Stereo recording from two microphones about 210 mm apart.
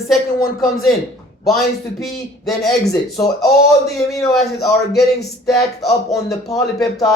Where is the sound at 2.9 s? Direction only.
15° left (ahead or behind).